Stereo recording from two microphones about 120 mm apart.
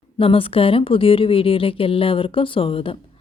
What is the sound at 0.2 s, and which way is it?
Speech, 50° left (ahead or behind).